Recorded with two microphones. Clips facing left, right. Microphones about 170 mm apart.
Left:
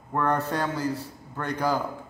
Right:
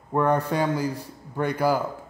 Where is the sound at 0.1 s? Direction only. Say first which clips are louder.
Right 3 dB; 15° right (ahead or behind).